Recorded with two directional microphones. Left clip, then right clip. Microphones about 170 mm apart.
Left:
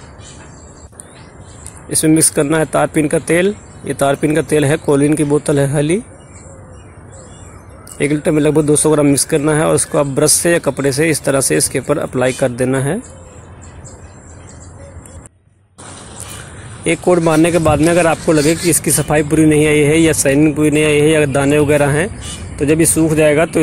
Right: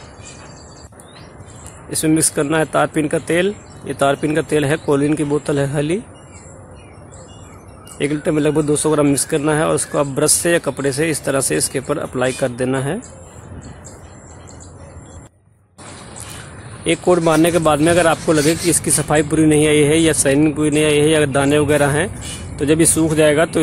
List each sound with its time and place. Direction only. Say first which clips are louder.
1.9 s speech: left 4 dB; 20° left (ahead or behind)
8.0 s speech: left 4 dB; 20° left (ahead or behind)
16.8 s speech: left 2 dB; 20° left (ahead or behind)